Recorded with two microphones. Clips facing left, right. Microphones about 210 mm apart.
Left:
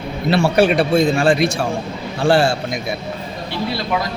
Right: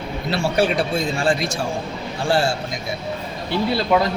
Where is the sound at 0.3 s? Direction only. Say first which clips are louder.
Left 5 dB; 65° left (ahead or behind).